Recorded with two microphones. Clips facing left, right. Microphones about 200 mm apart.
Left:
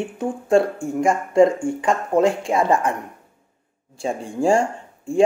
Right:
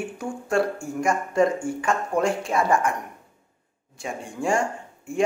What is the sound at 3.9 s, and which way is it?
Speech, 30° left (ahead or behind).